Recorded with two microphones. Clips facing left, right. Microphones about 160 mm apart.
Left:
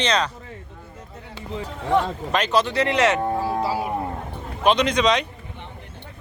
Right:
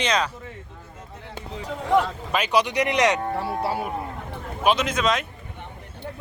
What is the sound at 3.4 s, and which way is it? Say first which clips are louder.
Music: left 2 dB; 65° right (ahead or behind).